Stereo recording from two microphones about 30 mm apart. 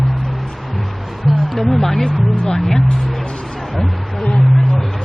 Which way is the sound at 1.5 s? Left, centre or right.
Centre.